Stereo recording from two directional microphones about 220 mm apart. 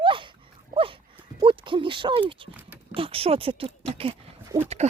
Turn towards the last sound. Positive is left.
turn(degrees=-10)  # may be behind; listen again after turning